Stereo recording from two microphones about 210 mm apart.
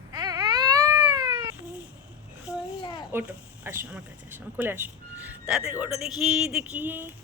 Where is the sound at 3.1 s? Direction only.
10° right (ahead or behind).